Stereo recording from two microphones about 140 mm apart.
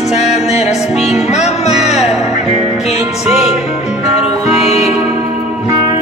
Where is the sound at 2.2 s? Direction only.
50° left (ahead or behind).